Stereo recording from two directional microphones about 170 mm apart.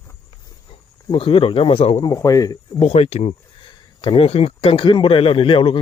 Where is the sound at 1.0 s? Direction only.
30° left (ahead or behind).